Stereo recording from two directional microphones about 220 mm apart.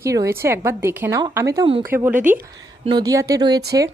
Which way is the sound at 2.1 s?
35° right (ahead or behind).